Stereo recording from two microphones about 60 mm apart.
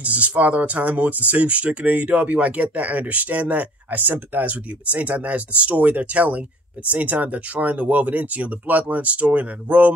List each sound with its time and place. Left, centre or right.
0.0 s speech: right